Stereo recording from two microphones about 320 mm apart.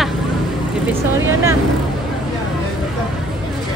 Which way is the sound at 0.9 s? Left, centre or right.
Centre.